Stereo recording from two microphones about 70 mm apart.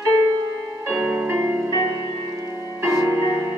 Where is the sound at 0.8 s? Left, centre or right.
Right.